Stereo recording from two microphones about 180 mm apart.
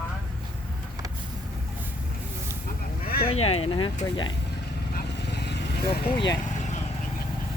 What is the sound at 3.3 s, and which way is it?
Speech, 35° left (ahead or behind).